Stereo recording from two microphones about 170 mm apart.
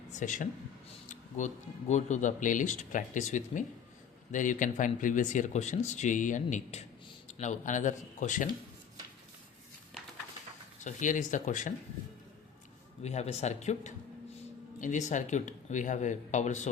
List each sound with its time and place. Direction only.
0.1 s speech: 45° left (ahead or behind)
10.8 s speech: 45° left (ahead or behind)
13.0 s speech: 40° left (ahead or behind)